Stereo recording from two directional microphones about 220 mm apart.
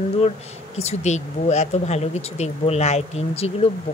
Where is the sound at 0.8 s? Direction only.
30° left (ahead or behind).